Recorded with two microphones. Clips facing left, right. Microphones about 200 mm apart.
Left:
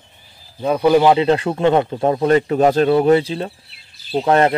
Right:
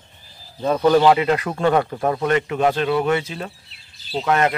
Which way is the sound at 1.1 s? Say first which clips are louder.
Left 4 dB; 30° left (ahead or behind).